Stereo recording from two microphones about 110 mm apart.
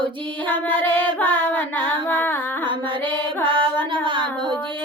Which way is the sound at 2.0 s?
15° left (ahead or behind).